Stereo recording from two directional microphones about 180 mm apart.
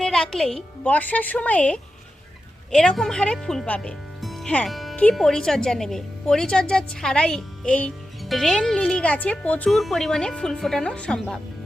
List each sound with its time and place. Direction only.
0.0 s a woman's voice: centre (ahead or behind)